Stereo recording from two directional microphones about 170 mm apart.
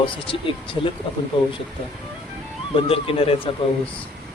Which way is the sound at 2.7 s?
35° left (ahead or behind).